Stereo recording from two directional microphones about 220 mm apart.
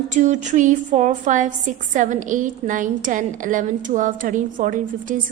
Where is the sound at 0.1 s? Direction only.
35° right (ahead or behind).